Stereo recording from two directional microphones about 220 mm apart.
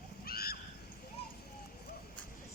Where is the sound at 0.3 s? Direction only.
45° left (ahead or behind).